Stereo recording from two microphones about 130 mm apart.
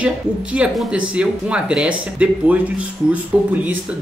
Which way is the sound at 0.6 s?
10° right (ahead or behind).